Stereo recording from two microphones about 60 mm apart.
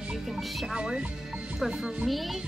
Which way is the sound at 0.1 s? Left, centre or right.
Centre.